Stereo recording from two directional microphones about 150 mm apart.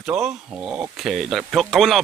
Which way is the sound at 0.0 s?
5° right (ahead or behind).